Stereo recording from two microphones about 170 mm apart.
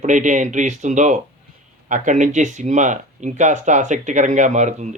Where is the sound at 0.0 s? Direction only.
45° right (ahead or behind).